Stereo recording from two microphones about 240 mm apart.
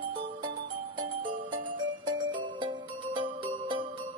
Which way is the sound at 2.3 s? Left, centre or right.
Right.